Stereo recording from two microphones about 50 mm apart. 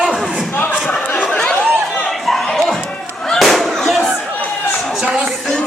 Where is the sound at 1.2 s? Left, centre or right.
Left.